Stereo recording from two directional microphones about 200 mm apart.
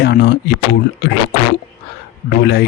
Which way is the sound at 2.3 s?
55° left (ahead or behind).